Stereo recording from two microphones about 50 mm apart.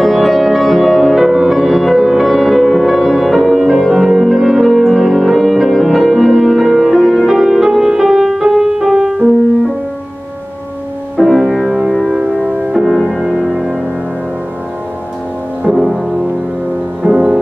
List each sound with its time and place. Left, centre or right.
0.0 s music: centre
11.2 s music: centre
13.2 s music: centre
13.5 s music: centre
15.8 s music: centre
17.0 s music: right